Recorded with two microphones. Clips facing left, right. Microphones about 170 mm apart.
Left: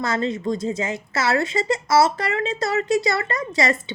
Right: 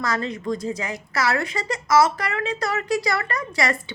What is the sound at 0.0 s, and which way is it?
A woman's voice, 25° left (ahead or behind).